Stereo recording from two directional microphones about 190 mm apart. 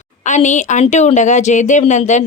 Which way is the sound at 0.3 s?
40° left (ahead or behind).